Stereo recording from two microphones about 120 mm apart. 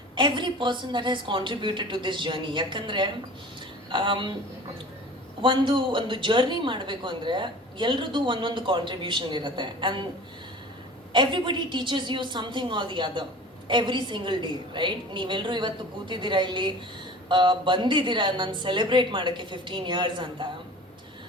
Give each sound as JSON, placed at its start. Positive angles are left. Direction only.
{"t": 0.2, "sound": "a woman's voice", "side_deg": -40}
{"t": 5.4, "sound": "a woman's voice", "side_deg": -40}
{"t": 11.1, "sound": "a woman's voice", "side_deg": -40}